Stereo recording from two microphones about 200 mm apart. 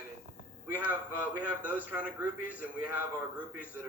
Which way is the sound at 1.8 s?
5° right (ahead or behind).